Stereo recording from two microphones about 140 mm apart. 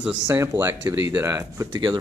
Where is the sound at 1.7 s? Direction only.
35° right (ahead or behind).